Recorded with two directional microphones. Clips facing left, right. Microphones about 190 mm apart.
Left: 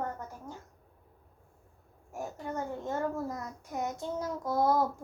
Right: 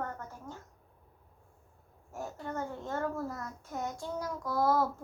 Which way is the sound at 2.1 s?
15° left (ahead or behind).